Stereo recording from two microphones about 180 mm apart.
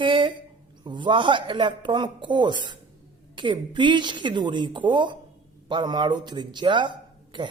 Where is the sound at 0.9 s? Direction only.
25° right (ahead or behind).